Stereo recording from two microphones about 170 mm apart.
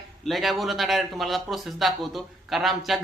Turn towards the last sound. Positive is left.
turn(degrees=0)  # may be behind; listen again after turning